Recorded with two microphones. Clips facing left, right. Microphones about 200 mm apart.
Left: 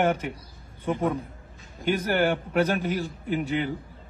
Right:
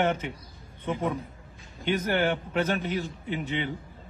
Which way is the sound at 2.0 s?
10° left (ahead or behind).